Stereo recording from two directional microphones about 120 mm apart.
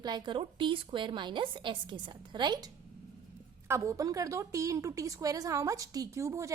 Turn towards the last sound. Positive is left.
turn(degrees=-25)  # may be behind; listen again after turning